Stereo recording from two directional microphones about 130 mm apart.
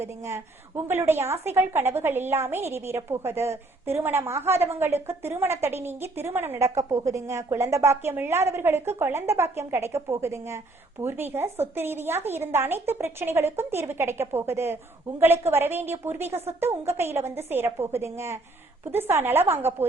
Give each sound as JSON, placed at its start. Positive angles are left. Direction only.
{"t": 0.0, "sound": "a woman's voice", "side_deg": -20}